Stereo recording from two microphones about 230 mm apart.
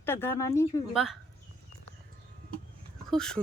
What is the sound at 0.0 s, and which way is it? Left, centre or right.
Speech, centre.